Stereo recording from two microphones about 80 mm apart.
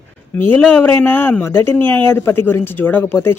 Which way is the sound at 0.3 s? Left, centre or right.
Left.